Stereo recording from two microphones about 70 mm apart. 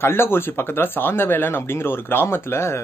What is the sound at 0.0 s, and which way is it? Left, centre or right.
Speech, left.